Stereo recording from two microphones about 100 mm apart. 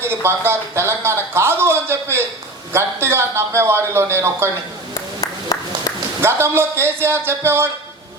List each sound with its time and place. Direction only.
0.0 s a man's voice: 25° right (ahead or behind)
5.5 s a sound: 40° left (ahead or behind)
6.2 s a man's voice: 25° right (ahead or behind)